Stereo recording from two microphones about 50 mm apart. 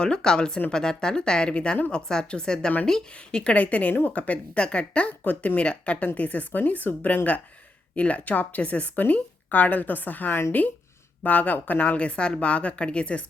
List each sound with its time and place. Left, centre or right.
0.0 s speech: centre
5.2 s speech: left